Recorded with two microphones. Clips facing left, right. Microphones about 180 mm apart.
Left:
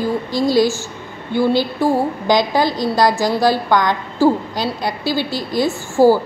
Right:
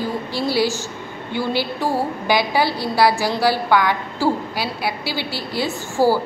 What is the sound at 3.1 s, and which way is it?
Speech, 15° left (ahead or behind).